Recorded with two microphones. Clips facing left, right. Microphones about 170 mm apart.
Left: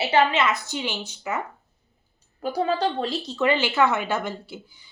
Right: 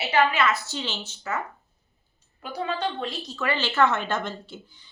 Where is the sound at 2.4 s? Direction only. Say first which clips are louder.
Left 5 dB; 40° left (ahead or behind).